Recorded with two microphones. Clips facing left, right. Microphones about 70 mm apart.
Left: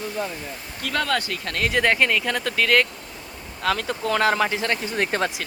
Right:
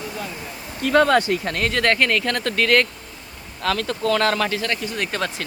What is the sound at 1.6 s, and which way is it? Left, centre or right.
Speech, centre.